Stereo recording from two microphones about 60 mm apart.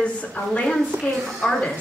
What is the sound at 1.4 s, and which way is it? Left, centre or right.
Speech, centre.